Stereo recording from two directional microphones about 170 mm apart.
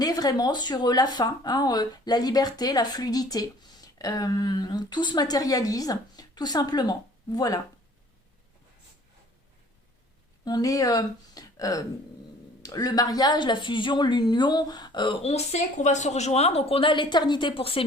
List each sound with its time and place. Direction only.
0.0 s speech: 20° left (ahead or behind)
10.4 s speech: 20° left (ahead or behind)
15.3 s a woman's voice: 40° left (ahead or behind)